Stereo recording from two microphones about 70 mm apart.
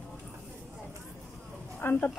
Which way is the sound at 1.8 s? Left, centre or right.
Left.